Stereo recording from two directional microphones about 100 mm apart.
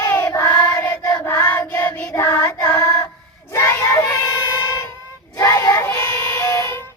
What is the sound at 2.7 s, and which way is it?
Female singing, 30° left (ahead or behind).